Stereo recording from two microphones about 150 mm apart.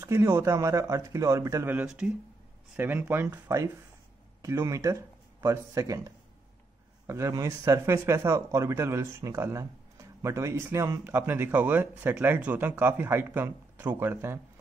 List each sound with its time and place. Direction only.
0.0 s a man's voice: 15° right (ahead or behind)